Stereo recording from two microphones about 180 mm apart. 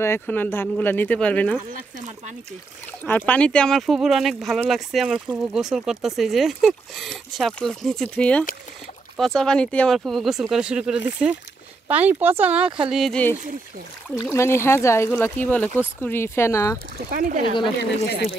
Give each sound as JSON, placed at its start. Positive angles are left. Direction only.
{"t": 0.0, "sound": "speech", "side_deg": 10}
{"t": 1.7, "sound": "speech", "side_deg": -45}
{"t": 3.0, "sound": "speech", "side_deg": 10}
{"t": 17.1, "sound": "speech", "side_deg": -50}